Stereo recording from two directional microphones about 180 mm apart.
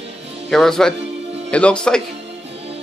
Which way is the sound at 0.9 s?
35° right (ahead or behind).